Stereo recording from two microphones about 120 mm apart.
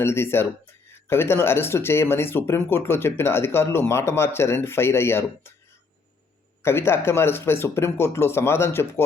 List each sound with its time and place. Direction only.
0.0 s speech: 20° left (ahead or behind)
6.6 s speech: 20° left (ahead or behind)